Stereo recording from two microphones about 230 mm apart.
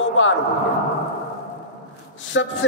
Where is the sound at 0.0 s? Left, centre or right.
Left.